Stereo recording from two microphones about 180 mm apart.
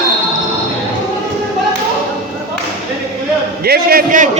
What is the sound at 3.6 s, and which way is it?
Speech, 60° right (ahead or behind).